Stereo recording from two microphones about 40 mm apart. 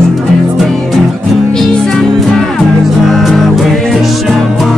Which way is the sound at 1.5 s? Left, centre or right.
Centre.